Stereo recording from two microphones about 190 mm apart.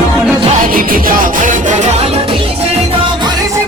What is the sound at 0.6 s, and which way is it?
Music, 45° right (ahead or behind).